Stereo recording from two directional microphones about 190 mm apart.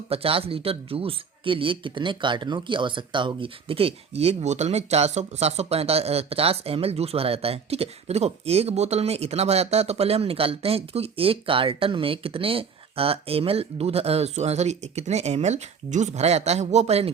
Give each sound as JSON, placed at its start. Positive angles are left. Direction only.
{"t": 0.1, "sound": "speech", "side_deg": -30}